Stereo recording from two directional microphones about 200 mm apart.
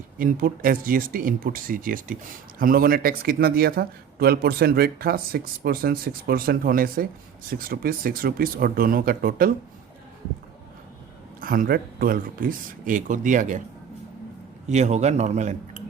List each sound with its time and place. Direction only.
0.2 s speech: 45° right (ahead or behind)
11.3 s speech: 45° right (ahead or behind)
14.7 s speech: 35° right (ahead or behind)